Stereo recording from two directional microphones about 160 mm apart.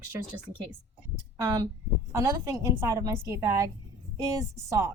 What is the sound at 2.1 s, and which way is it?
A woman's voice, 20° right (ahead or behind).